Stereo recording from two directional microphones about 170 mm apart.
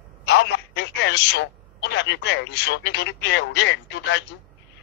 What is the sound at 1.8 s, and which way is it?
Speech, 90° left.